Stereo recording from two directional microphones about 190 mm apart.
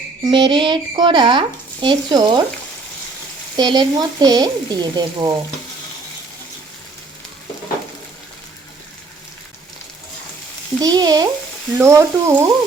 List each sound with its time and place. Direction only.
0.3 s speech: 25° right (ahead or behind)
3.6 s speech: 20° right (ahead or behind)
10.8 s speech: 20° right (ahead or behind)